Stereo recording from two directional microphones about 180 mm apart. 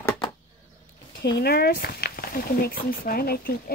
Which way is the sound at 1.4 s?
60° left (ahead or behind).